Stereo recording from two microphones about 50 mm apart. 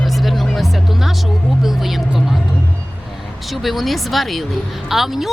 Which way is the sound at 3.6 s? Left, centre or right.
Centre.